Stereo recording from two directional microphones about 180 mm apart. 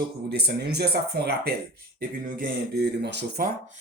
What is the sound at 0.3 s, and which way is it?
Speech, 65° right (ahead or behind).